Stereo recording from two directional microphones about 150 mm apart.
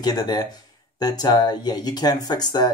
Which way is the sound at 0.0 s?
25° left (ahead or behind).